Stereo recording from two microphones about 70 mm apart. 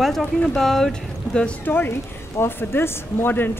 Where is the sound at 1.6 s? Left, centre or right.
Left.